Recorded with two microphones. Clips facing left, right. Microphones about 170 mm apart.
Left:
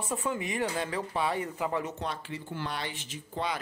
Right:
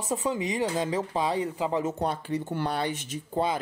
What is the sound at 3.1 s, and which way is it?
Speech, 35° right (ahead or behind).